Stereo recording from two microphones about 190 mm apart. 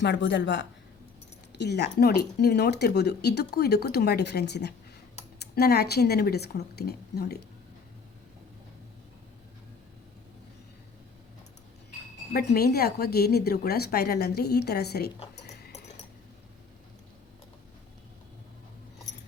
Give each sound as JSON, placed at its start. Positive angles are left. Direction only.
{"t": 0.0, "sound": "a woman's voice", "side_deg": 65}
{"t": 12.3, "sound": "speech", "side_deg": 55}